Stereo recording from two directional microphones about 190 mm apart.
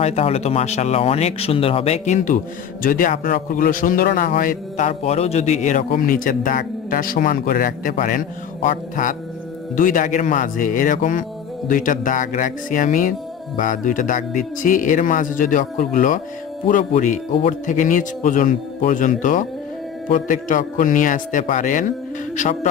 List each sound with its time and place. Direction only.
0.0 s a man's voice: 30° left (ahead or behind)
17.3 s speech: 30° left (ahead or behind)
17.7 s a man's voice: 45° left (ahead or behind)